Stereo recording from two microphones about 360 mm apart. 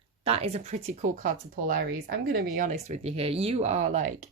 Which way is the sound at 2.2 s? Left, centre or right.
Right.